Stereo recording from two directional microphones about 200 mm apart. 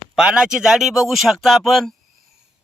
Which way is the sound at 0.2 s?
5° right (ahead or behind).